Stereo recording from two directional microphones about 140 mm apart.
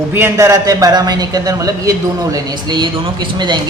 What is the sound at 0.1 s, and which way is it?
A man's voice, 20° right (ahead or behind).